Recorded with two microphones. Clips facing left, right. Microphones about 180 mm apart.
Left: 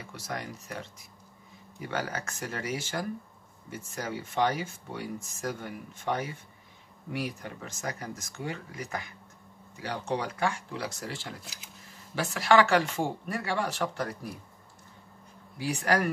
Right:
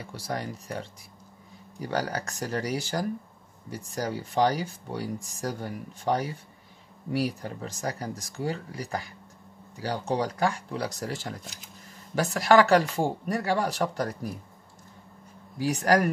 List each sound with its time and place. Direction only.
0.0 s speech: 35° right (ahead or behind)
15.5 s speech: 40° right (ahead or behind)